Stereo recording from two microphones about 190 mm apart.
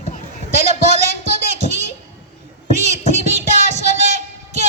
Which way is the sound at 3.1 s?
40° right (ahead or behind).